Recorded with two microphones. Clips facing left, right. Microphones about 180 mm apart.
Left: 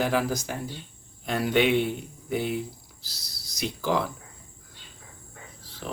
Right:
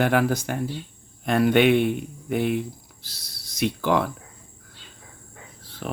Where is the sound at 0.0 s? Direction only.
60° right (ahead or behind).